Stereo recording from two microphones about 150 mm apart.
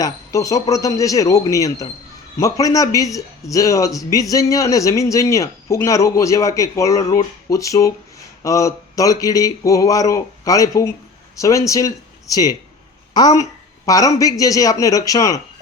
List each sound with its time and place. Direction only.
0.0 s speech: 20° left (ahead or behind)